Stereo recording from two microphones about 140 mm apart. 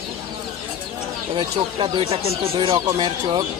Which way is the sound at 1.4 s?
35° right (ahead or behind).